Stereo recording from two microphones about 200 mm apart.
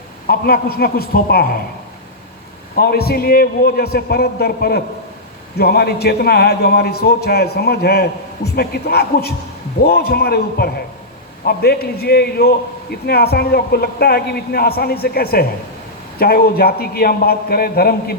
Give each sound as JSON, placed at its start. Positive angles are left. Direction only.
{"t": 0.3, "sound": "a man's voice", "side_deg": 50}
{"t": 2.7, "sound": "a man's voice", "side_deg": 50}